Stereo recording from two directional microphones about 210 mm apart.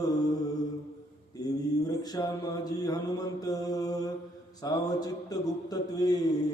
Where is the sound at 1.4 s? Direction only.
20° left (ahead or behind).